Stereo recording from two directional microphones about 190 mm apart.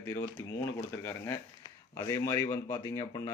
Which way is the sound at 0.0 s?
15° left (ahead or behind).